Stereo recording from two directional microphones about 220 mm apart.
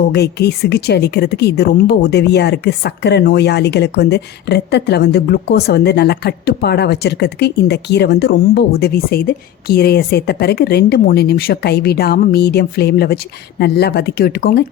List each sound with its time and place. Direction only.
0.1 s speech: 50° left (ahead or behind)